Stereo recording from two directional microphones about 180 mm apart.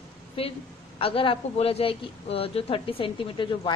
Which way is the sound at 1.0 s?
30° left (ahead or behind).